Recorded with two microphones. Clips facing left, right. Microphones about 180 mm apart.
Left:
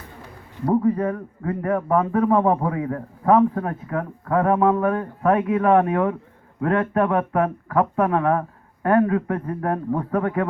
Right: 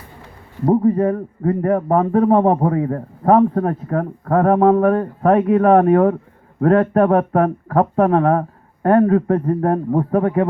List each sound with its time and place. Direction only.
0.6 s a man's voice: 30° right (ahead or behind)